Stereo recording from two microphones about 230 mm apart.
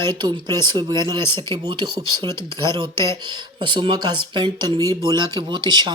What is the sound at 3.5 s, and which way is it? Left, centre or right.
Speech, right.